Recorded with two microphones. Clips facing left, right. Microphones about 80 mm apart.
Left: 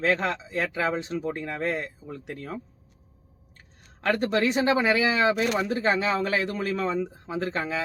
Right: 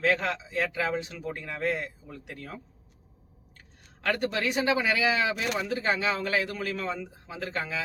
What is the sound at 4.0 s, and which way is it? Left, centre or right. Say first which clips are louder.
Speech: left 4 dB; left.